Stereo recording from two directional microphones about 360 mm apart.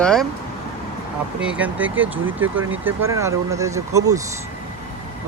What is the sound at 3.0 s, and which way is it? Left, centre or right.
Speech, centre.